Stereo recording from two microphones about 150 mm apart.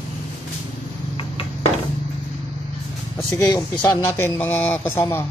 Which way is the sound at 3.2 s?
15° left (ahead or behind).